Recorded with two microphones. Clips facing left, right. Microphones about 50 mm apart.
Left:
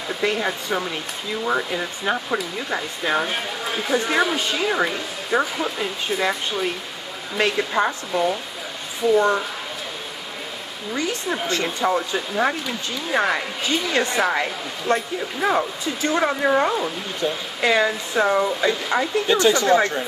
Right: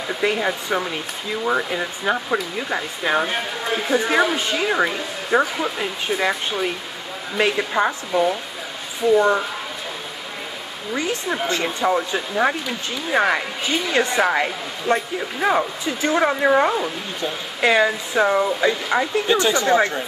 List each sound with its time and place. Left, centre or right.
0.2 s speech: centre
11.4 s speech: right
11.8 s speech: centre
19.2 s speech: right